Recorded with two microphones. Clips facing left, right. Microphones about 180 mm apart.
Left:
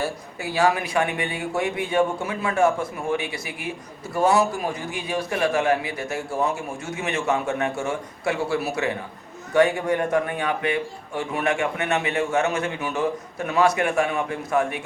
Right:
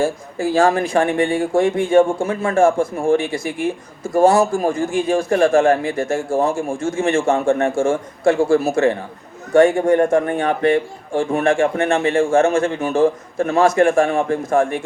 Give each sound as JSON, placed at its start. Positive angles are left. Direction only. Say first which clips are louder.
{"t": 0.0, "sound": "speech", "louder": "right 9 dB", "side_deg": -45}